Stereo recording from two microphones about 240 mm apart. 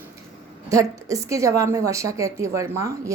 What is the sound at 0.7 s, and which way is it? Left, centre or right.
A woman's voice, centre.